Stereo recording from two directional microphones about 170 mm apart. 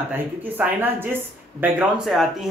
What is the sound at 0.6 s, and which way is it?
A woman's voice, 10° right (ahead or behind).